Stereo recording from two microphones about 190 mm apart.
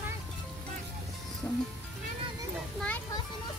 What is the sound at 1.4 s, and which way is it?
Speech, 15° left (ahead or behind).